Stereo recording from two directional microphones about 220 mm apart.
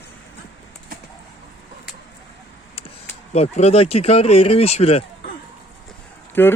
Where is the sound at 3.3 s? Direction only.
30° left (ahead or behind).